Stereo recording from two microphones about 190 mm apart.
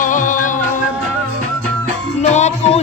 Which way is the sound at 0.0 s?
45° left (ahead or behind).